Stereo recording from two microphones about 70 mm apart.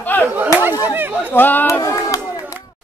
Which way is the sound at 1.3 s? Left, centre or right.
Left.